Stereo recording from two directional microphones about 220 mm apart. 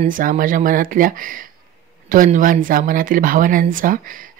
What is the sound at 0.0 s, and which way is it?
Speech, 40° right (ahead or behind).